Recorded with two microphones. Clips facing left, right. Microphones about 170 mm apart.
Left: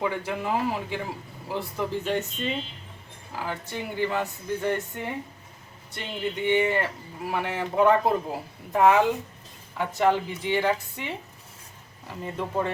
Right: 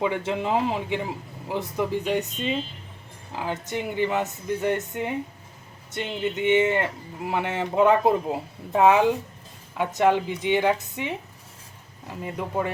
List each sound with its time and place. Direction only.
0.0 s speech: 20° right (ahead or behind)
3.3 s a woman's voice: 20° right (ahead or behind)
12.2 s a woman's voice: 15° right (ahead or behind)